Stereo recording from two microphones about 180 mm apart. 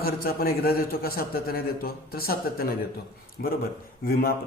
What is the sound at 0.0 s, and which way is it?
A man's voice, 55° left (ahead or behind).